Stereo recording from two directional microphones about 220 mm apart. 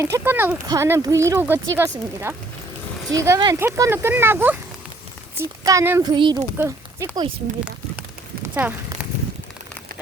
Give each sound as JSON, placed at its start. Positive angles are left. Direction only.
{"t": 0.0, "sound": "speech", "side_deg": -10}
{"t": 8.6, "sound": "speech", "side_deg": -5}